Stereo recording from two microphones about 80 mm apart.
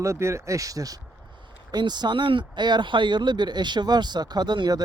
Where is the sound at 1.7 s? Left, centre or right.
Right.